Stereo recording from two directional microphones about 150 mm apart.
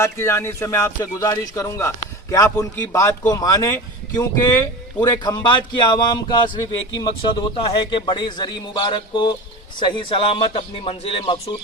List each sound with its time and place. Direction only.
0.0 s a man's voice: 20° left (ahead or behind); by 11.5 s 40° left (ahead or behind)